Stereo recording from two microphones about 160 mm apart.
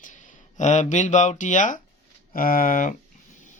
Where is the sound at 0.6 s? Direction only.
50° left (ahead or behind).